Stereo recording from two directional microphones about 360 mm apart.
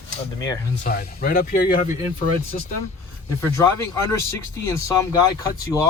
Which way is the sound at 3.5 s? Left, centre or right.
Centre.